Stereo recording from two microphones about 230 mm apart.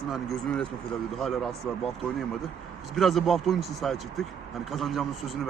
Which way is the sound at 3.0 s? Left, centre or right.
Centre.